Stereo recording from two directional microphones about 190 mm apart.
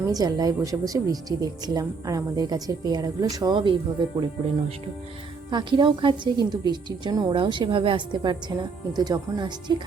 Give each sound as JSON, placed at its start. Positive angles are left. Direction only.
{"t": 0.0, "sound": "a woman's voice", "side_deg": -20}
{"t": 5.5, "sound": "a woman's voice", "side_deg": -25}